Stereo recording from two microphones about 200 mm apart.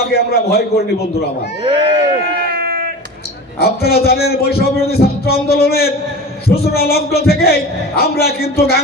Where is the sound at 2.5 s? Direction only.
50° right (ahead or behind).